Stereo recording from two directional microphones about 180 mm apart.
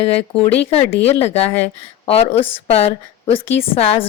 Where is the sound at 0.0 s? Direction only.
35° left (ahead or behind).